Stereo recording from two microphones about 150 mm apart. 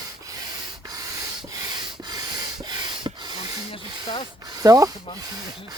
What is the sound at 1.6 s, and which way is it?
Rub, 30° right (ahead or behind).